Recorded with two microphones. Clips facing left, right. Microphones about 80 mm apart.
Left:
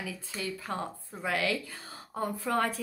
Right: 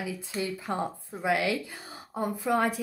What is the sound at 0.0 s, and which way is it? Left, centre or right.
A woman's voice, right.